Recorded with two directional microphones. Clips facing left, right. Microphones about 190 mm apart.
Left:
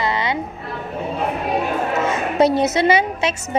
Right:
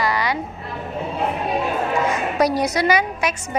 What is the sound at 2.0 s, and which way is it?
A woman's voice, 25° left (ahead or behind).